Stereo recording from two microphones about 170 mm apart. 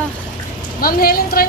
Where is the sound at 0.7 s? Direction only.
60° left (ahead or behind).